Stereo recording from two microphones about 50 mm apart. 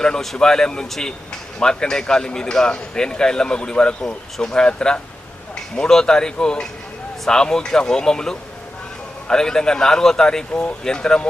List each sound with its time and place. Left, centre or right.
0.0 s speech: centre
10.5 s speech: left
10.8 s speech: centre